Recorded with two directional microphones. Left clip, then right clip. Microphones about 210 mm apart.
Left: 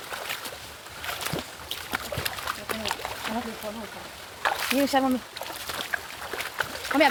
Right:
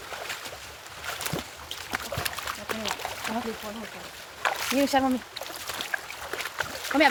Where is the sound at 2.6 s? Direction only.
15° right (ahead or behind).